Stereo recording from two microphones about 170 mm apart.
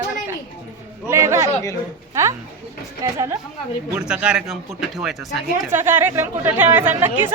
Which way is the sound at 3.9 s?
5° right (ahead or behind).